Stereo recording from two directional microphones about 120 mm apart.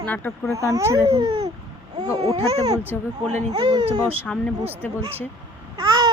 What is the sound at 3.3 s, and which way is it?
Speech, 70° right (ahead or behind).